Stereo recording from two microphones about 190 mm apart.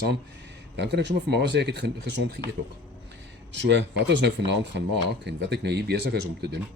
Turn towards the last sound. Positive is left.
turn(degrees=-60)  # may be behind; listen again after turning